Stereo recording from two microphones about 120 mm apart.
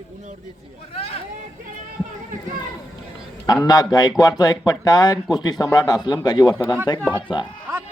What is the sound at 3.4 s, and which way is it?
Speech, 35° left (ahead or behind).